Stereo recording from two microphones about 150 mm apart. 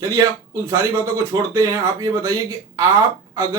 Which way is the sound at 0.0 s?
20° right (ahead or behind).